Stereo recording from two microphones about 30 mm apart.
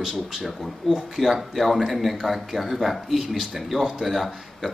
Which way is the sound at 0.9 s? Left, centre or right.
Centre.